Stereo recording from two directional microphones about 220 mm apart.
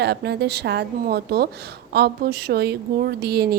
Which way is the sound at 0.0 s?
50° right (ahead or behind).